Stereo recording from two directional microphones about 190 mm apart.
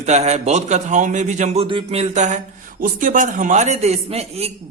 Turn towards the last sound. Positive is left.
turn(degrees=-30)  # may be behind; listen again after turning